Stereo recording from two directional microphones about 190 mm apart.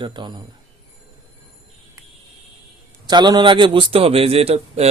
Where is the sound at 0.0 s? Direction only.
25° right (ahead or behind).